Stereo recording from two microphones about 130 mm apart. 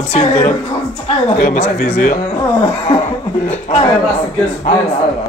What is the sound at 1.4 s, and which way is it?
Speech, 85° left.